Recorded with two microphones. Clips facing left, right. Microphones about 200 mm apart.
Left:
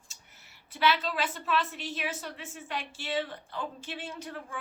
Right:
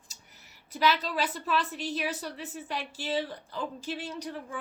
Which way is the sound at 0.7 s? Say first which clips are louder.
Right 1 dB; 40° right (ahead or behind).